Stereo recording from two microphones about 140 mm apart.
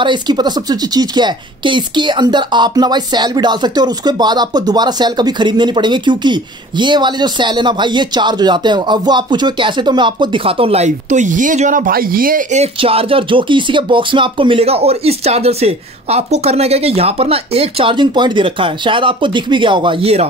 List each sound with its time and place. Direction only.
0.0 s speech: 30° right (ahead or behind); by 12.4 s 90° right
12.5 s speech: 45° right (ahead or behind)